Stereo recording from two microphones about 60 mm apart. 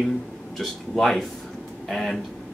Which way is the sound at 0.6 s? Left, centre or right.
Centre.